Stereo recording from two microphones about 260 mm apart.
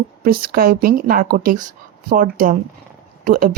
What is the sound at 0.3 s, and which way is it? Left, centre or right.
A woman's voice, right.